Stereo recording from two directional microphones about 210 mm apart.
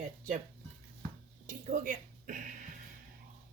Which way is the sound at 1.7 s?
35° right (ahead or behind).